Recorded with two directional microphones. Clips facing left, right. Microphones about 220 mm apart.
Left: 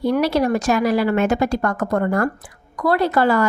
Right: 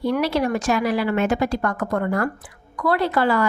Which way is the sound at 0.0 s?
40° left (ahead or behind).